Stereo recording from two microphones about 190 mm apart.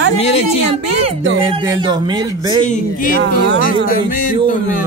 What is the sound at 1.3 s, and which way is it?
Speech, 25° right (ahead or behind).